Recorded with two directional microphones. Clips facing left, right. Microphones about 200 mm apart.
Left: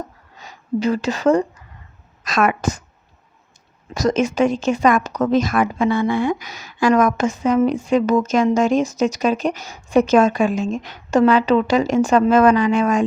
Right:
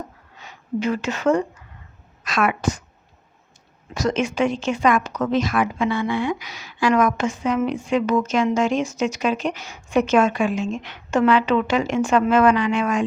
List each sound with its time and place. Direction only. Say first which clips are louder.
0.3 s a woman's voice: left 3 dB; 35° left (ahead or behind)
3.9 s speech: left 4 dB; 40° left (ahead or behind)